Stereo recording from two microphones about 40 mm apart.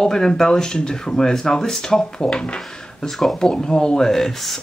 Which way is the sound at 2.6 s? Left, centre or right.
Centre.